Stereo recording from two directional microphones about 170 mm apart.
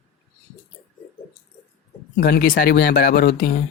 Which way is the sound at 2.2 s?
55° left (ahead or behind).